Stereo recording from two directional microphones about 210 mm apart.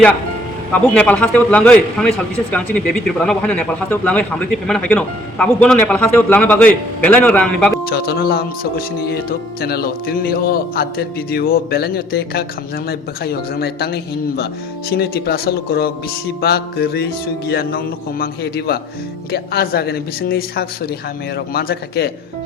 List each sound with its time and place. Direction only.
0.7 s a man's voice: 5° left (ahead or behind)
7.9 s a man's voice: 45° left (ahead or behind)